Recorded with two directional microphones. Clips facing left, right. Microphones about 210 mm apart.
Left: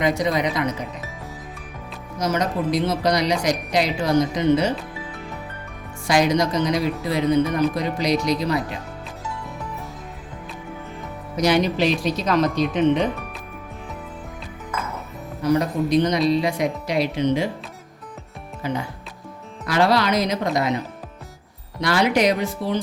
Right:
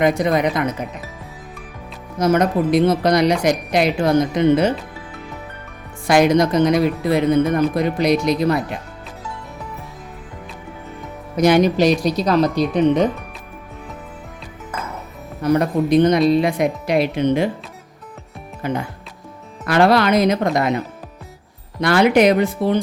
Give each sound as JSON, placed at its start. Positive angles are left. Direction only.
{"t": 0.0, "sound": "a woman's voice", "side_deg": -55}
{"t": 2.1, "sound": "speech", "side_deg": -55}
{"t": 6.1, "sound": "speech", "side_deg": -55}
{"t": 11.3, "sound": "speech", "side_deg": -50}
{"t": 15.4, "sound": "speech", "side_deg": -55}
{"t": 18.6, "sound": "speech", "side_deg": -55}